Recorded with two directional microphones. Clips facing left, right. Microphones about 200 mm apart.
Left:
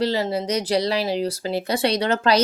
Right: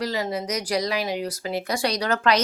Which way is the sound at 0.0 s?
30° left (ahead or behind).